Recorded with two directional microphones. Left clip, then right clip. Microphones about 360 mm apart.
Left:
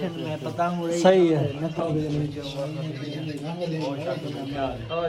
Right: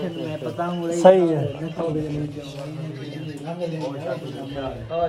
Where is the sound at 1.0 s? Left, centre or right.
Left.